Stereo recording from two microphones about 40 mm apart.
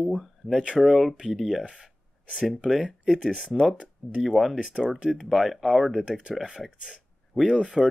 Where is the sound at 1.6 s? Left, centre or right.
Centre.